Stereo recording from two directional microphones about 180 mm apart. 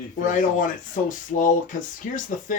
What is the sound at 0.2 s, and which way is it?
Speech, 45° left (ahead or behind).